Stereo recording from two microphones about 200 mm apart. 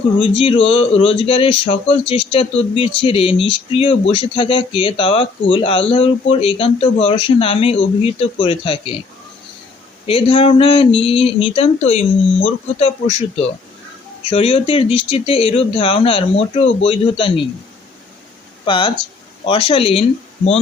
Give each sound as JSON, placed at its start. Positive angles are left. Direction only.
{"t": 0.2, "sound": "speech", "side_deg": 25}
{"t": 10.1, "sound": "speech", "side_deg": 25}
{"t": 18.6, "sound": "speech", "side_deg": 25}